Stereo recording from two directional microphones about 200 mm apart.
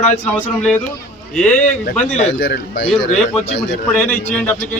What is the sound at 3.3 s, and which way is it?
A man's voice, 10° left (ahead or behind).